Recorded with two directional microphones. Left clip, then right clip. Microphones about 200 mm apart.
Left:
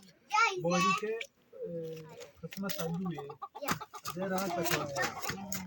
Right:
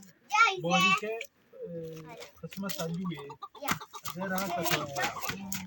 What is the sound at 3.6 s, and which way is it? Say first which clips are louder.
Chicken: right 3 dB; 15° right (ahead or behind).